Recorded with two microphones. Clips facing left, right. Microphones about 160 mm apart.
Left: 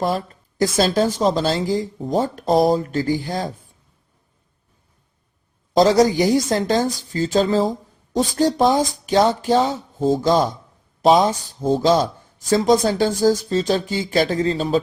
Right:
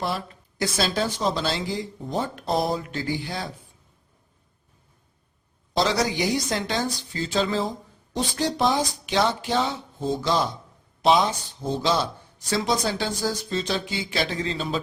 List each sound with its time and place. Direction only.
0.0 s speech: 40° left (ahead or behind)
5.7 s speech: 45° left (ahead or behind)